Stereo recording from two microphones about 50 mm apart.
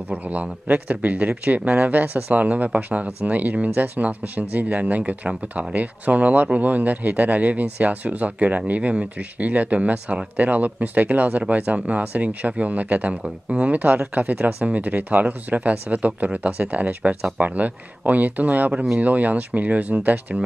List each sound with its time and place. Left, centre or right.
0.1 s speech: right